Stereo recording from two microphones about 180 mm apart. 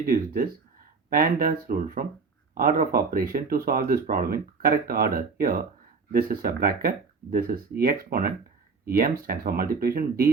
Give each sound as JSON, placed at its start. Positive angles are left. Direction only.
{"t": 0.0, "sound": "speech", "side_deg": -55}